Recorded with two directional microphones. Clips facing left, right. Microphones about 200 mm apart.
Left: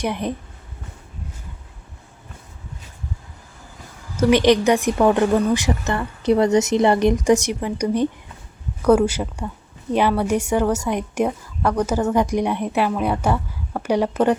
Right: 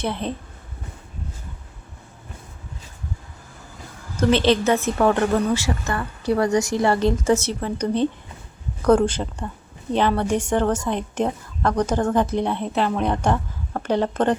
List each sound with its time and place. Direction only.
0.0 s speech: 15° left (ahead or behind)
4.2 s speech: 15° left (ahead or behind)